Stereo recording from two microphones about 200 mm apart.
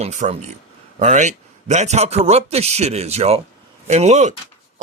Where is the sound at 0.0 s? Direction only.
35° right (ahead or behind).